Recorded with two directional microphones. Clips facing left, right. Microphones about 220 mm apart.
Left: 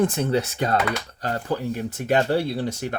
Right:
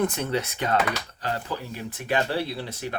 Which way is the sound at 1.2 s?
45° left (ahead or behind).